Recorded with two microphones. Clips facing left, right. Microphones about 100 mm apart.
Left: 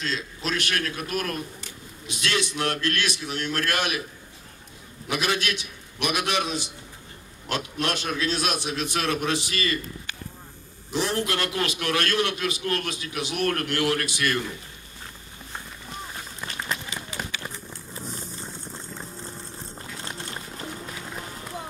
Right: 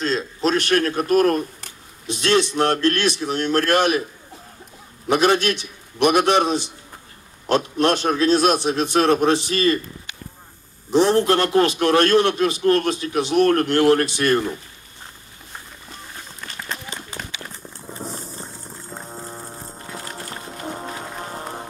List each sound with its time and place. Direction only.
0.0 s a sound: 35° right (ahead or behind)
2.5 s a man's voice: 35° right (ahead or behind)
5.0 s a man's voice: 40° right (ahead or behind)
10.9 s a man's voice: 35° right (ahead or behind)
19.1 s horse: 45° right (ahead or behind)
20.6 s run: 45° right (ahead or behind)